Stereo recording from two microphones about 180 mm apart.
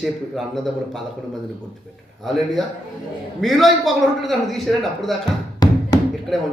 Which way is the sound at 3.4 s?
Centre (ahead or behind).